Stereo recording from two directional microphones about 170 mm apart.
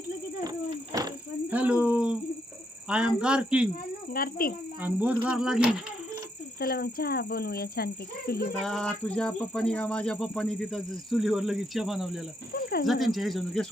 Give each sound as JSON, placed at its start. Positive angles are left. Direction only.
{"t": 0.9, "sound": "cricket", "side_deg": -20}
{"t": 1.5, "sound": "a sound", "side_deg": -10}
{"t": 2.9, "sound": "speech", "side_deg": -5}
{"t": 4.1, "sound": "speech", "side_deg": 60}
{"t": 4.8, "sound": "speech", "side_deg": -10}
{"t": 6.6, "sound": "speech", "side_deg": 65}
{"t": 8.6, "sound": "speech", "side_deg": 5}